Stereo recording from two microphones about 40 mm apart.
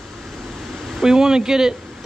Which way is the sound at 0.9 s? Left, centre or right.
Centre.